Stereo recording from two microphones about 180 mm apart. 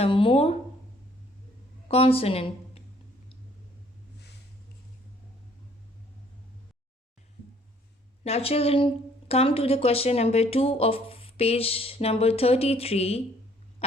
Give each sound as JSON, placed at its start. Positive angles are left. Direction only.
{"t": 0.0, "sound": "speech", "side_deg": 30}
{"t": 1.9, "sound": "speech", "side_deg": 30}
{"t": 8.2, "sound": "speech", "side_deg": 35}